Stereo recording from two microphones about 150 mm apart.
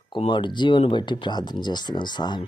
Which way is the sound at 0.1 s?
30° left (ahead or behind).